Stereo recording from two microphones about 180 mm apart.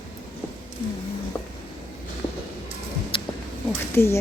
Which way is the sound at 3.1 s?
30° left (ahead or behind).